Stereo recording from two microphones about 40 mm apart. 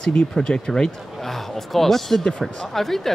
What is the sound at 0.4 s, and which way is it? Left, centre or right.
A man's voice, centre.